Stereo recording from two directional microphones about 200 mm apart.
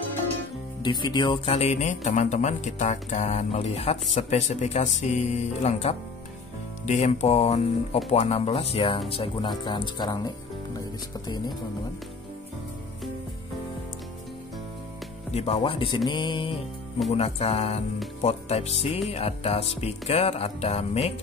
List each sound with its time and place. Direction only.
0.8 s speech: 20° left (ahead or behind)
15.3 s speech: 30° left (ahead or behind)